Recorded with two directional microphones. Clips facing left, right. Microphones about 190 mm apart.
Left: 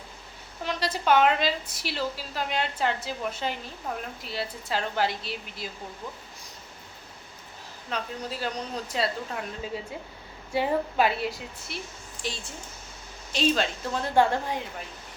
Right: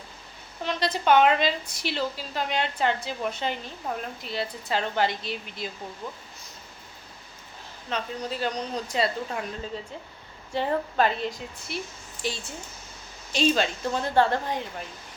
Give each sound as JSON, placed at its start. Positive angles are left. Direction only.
{"t": 0.6, "sound": "a woman's voice", "side_deg": 10}
{"t": 7.9, "sound": "a woman's voice", "side_deg": 5}
{"t": 12.2, "sound": "a woman's voice", "side_deg": -5}